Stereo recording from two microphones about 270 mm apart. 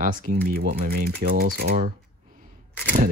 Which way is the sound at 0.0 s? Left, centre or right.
Right.